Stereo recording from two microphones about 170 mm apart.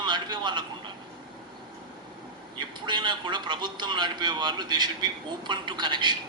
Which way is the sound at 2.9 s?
25° right (ahead or behind).